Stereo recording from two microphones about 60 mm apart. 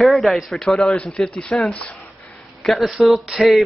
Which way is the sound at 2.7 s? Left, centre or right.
Centre.